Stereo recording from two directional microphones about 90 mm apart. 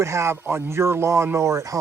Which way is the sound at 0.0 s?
30° right (ahead or behind).